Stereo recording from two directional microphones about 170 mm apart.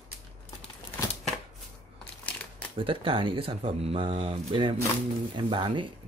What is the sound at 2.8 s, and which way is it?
Speech, 30° right (ahead or behind).